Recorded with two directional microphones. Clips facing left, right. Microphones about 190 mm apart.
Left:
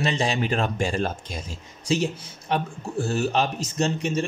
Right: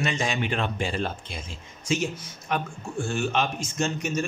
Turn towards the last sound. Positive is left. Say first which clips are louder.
# left 3 dB
turn(degrees=30)  # may be behind; listen again after turning